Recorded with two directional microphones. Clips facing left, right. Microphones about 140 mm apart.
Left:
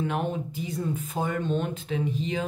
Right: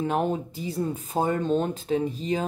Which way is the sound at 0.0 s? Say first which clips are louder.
Right 3 dB; 35° right (ahead or behind).